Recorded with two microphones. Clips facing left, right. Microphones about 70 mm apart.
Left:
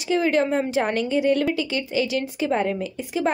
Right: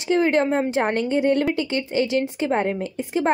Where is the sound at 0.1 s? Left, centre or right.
Right.